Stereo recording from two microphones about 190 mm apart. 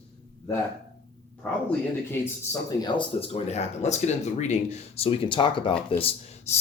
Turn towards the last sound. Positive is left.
turn(degrees=35)  # may be behind; listen again after turning